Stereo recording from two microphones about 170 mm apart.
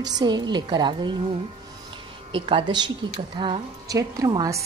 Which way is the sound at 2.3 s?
30° right (ahead or behind).